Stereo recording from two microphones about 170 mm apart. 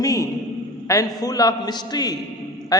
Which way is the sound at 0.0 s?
20° left (ahead or behind).